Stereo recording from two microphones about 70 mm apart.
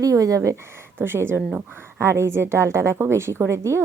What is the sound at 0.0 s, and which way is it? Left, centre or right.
Speech, right.